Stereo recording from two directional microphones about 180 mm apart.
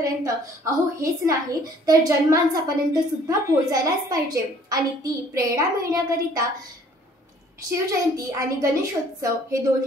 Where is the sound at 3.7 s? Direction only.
20° right (ahead or behind).